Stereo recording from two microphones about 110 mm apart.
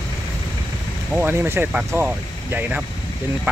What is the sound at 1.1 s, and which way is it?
Speech, 20° right (ahead or behind).